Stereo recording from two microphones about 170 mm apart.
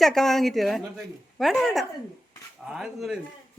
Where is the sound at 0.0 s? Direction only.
Centre (ahead or behind).